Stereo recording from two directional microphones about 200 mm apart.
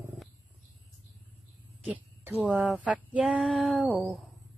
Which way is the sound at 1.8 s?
10° right (ahead or behind).